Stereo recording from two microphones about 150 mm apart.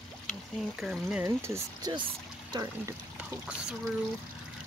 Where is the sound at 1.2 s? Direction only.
20° right (ahead or behind).